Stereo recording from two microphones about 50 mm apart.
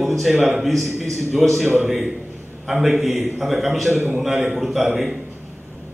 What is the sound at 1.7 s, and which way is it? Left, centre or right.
A man's voice, centre.